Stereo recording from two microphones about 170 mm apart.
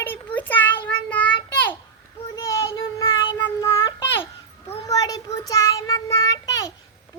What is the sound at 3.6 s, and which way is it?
Babbling, 15° left (ahead or behind).